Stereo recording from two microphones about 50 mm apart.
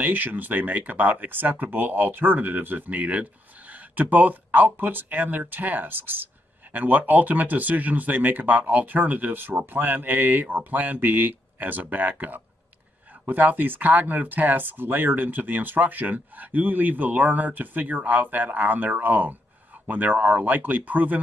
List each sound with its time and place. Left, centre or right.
0.0 s speech: right